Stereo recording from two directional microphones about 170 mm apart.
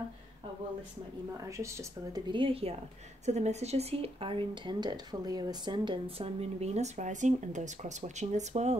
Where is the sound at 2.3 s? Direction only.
30° right (ahead or behind).